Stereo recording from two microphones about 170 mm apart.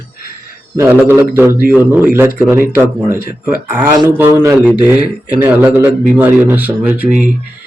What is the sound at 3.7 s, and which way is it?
A man's voice, 15° right (ahead or behind).